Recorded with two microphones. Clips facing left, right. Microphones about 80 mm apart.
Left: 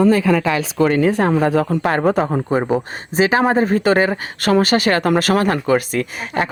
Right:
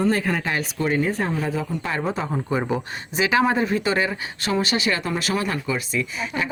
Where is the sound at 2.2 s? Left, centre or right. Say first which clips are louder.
Left 6 dB; left.